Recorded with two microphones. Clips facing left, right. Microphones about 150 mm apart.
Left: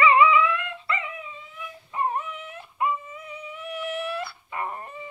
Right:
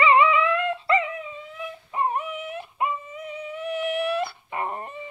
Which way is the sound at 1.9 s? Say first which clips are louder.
Right 1 dB; 15° right (ahead or behind).